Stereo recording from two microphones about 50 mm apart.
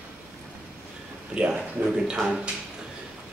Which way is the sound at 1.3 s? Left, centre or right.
Centre.